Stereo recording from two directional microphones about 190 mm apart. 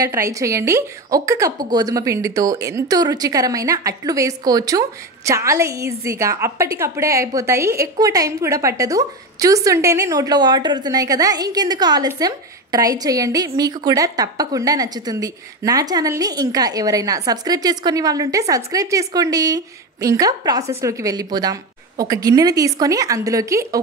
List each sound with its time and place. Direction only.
0.0 s a woman's voice: 15° right (ahead or behind)